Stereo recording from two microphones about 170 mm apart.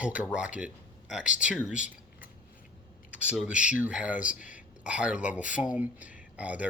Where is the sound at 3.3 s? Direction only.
5° right (ahead or behind).